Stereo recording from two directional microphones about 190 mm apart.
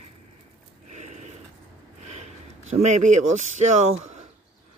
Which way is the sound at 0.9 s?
40° right (ahead or behind).